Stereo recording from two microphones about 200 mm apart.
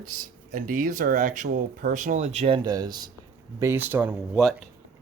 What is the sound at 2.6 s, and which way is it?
Speech, 20° right (ahead or behind).